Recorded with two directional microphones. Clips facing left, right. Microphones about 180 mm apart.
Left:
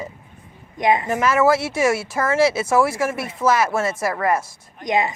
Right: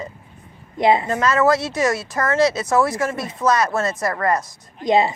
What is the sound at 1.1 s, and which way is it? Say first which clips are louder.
Speech: even; 10° left (ahead or behind).